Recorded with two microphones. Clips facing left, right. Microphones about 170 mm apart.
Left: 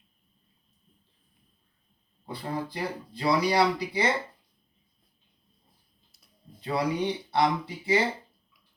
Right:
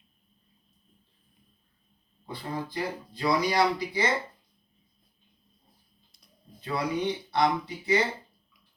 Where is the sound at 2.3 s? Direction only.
30° left (ahead or behind).